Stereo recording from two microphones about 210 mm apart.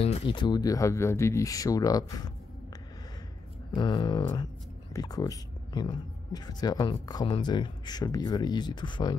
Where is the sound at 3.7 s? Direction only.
20° left (ahead or behind).